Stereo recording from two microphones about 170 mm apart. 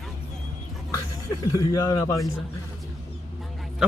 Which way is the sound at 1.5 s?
20° left (ahead or behind).